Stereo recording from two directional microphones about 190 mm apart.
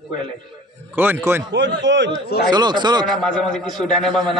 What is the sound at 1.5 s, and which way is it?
Speech, 70° right (ahead or behind).